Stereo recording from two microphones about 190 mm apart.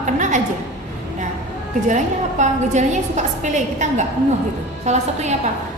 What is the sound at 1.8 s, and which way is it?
A woman's voice, 40° right (ahead or behind).